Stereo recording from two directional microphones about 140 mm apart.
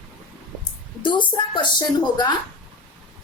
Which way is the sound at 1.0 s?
35° left (ahead or behind).